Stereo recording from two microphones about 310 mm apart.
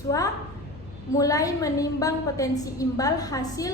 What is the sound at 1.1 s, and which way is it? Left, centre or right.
A woman's voice, centre.